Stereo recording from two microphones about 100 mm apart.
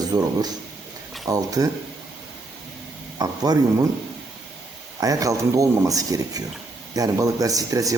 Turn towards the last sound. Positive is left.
turn(degrees=-35)  # may be behind; listen again after turning